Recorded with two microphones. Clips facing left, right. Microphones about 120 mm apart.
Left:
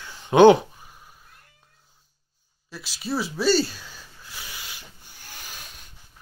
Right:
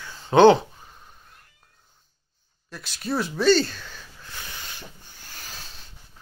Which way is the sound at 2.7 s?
5° left (ahead or behind).